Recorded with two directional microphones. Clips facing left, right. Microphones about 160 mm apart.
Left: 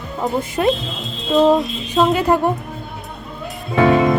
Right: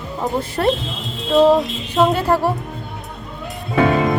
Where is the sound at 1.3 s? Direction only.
5° right (ahead or behind).